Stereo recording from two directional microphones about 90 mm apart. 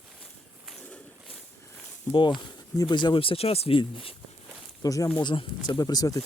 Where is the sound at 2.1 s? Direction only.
65° left (ahead or behind); by 4.1 s 80° left.